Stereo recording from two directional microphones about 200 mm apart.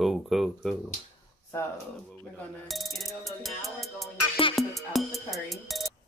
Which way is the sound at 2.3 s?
Centre (ahead or behind).